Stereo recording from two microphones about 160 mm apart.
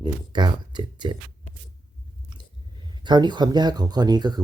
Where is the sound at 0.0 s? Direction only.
30° right (ahead or behind).